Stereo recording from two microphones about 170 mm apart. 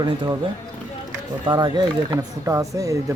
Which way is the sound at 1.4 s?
25° right (ahead or behind).